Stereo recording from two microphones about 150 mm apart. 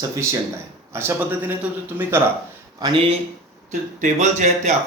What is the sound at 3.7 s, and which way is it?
Speech, 55° right (ahead or behind).